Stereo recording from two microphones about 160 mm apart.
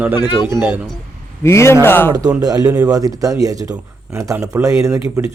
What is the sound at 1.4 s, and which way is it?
Speech, 15° left (ahead or behind).